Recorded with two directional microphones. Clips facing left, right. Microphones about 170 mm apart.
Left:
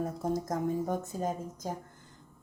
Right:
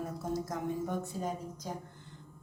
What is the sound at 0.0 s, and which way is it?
A woman's voice, 45° left (ahead or behind).